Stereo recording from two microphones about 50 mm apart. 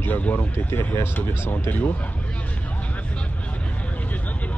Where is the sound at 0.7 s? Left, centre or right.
Left.